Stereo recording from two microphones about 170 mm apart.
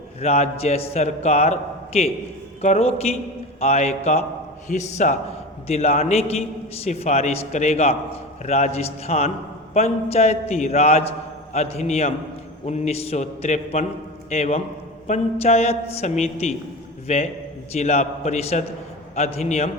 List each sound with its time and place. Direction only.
0.2 s a man's voice: 40° left (ahead or behind)